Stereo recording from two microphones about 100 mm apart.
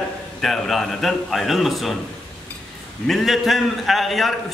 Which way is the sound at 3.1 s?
Centre (ahead or behind).